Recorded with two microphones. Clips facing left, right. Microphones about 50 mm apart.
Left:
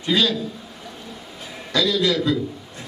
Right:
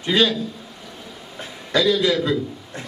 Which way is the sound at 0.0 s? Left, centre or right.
Centre.